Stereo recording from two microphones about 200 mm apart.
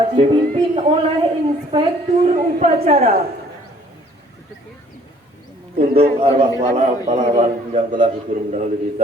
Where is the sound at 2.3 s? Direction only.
35° right (ahead or behind).